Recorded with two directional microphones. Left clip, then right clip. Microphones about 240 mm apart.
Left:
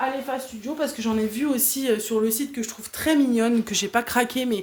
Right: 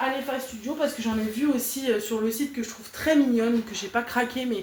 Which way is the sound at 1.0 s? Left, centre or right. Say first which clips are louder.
Left 3 dB; left.